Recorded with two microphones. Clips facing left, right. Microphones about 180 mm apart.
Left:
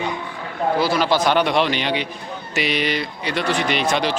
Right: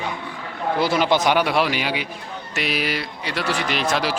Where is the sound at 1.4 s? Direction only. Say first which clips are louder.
Left 2 dB; 5° right (ahead or behind).